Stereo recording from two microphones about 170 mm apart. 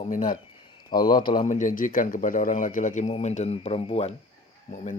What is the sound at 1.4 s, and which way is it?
A man's voice, 50° left (ahead or behind).